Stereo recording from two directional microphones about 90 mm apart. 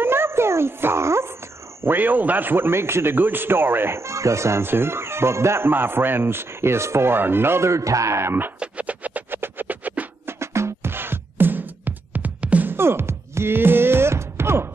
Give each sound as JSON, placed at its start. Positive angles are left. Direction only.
{"t": 0.0, "sound": "a sound", "side_deg": -25}
{"t": 1.8, "sound": "a man's voice", "side_deg": -20}
{"t": 8.5, "sound": "music", "side_deg": -15}
{"t": 10.4, "sound": "music", "side_deg": -30}